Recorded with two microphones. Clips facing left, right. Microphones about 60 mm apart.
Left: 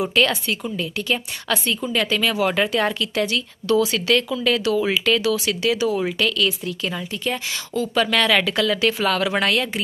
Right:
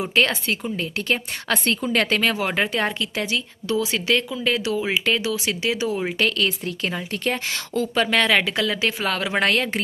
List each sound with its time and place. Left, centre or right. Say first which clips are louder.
0.0 s a woman's voice: left 1 dB; right
2.3 s speech: left 3 dB; right
7.9 s speech: left 1 dB; right
9.4 s a woman's voice: even; right